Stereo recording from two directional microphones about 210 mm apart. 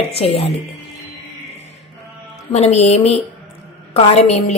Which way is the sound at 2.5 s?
30° left (ahead or behind).